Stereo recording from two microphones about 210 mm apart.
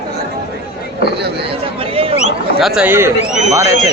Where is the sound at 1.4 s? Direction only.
25° right (ahead or behind).